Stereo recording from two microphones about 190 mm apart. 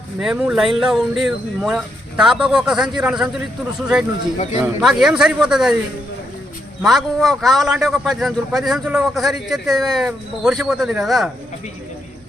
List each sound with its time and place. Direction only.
0.2 s a man's voice: centre (ahead or behind)
6.8 s a man's voice: centre (ahead or behind)